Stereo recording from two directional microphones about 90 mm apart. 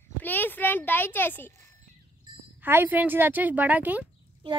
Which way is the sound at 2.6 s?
20° right (ahead or behind).